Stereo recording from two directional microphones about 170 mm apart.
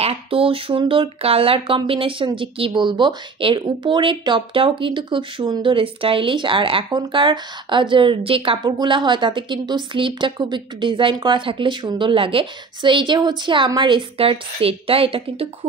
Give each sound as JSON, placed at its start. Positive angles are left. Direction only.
{"t": 0.0, "sound": "a woman's voice", "side_deg": -35}